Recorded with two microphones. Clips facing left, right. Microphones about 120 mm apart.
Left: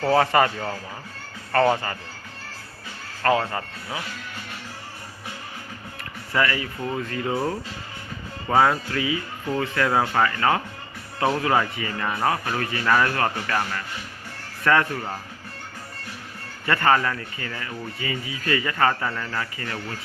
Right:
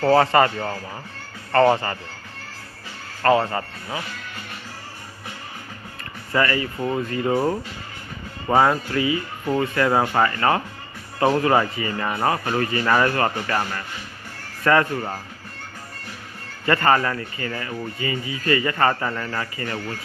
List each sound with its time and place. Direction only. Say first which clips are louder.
0.0 s speech: right 3 dB; centre (ahead or behind)
1.5 s speech: right 3 dB; centre (ahead or behind)
3.4 s speech: right 3 dB; centre (ahead or behind)
6.0 s music: right 2 dB; centre (ahead or behind)
6.9 s speech: right 4 dB; 5° right (ahead or behind)
7.3 s speech: right 4 dB; 15° right (ahead or behind)
8.4 s speech: right 2 dB; 5° right (ahead or behind)
16.6 s speech: right 2 dB; 5° right (ahead or behind)